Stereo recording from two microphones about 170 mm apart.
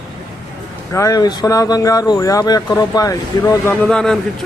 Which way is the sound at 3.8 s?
5° left (ahead or behind).